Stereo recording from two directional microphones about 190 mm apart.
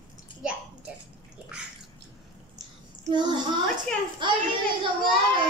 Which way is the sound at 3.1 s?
25° right (ahead or behind).